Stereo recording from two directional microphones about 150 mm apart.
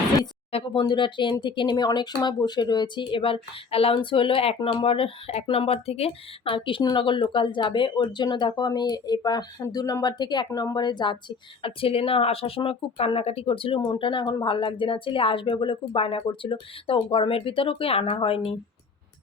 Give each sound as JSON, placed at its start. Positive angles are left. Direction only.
{"t": 0.5, "sound": "speech", "side_deg": 35}